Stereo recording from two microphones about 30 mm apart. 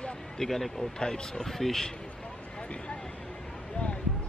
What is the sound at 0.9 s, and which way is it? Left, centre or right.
Speech, left.